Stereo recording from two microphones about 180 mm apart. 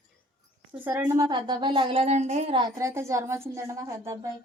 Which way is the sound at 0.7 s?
10° right (ahead or behind).